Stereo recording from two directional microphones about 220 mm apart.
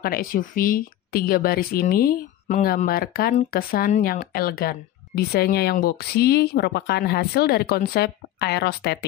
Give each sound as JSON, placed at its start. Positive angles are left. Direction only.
{"t": 0.0, "sound": "speech", "side_deg": 40}